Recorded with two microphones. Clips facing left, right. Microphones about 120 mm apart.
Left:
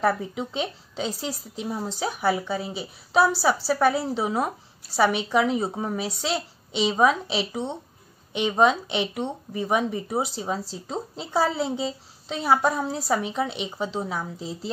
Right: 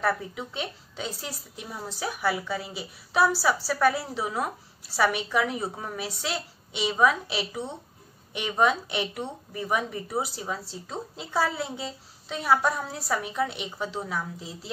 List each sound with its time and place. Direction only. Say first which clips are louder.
0.0 s a woman's voice: left 4 dB; 25° left (ahead or behind)